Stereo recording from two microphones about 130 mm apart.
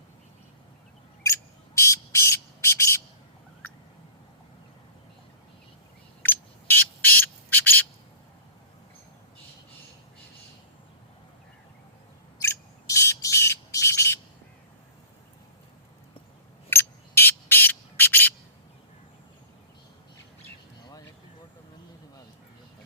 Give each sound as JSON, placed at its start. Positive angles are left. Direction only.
{"t": 1.2, "sound": "bird", "side_deg": 20}
{"t": 6.2, "sound": "bird", "side_deg": 15}
{"t": 12.4, "sound": "bird", "side_deg": 20}
{"t": 16.6, "sound": "bird", "side_deg": 20}